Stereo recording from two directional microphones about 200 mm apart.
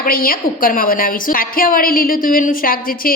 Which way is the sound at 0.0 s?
45° left (ahead or behind).